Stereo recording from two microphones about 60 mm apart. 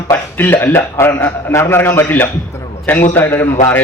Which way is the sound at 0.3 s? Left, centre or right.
Left.